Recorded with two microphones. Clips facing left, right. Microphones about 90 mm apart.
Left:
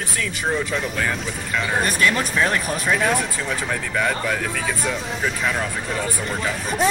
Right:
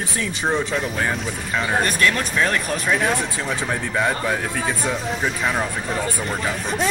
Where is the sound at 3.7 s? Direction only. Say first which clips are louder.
Right 1 dB; 20° right (ahead or behind).